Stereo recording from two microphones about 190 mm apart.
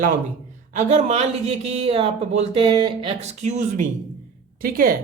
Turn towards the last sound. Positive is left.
turn(degrees=-50)  # may be behind; listen again after turning